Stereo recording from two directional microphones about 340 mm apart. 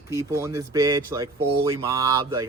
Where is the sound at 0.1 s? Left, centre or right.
Centre.